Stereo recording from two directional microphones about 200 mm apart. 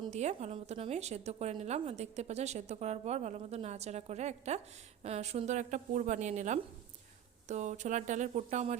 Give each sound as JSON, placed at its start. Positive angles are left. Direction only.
{"t": 0.1, "sound": "a woman's voice", "side_deg": -35}